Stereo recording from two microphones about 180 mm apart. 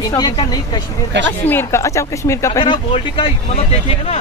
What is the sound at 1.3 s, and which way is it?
Speech, 10° left (ahead or behind).